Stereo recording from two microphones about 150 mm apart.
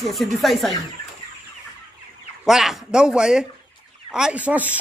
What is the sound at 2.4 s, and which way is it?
A man's voice, centre (ahead or behind).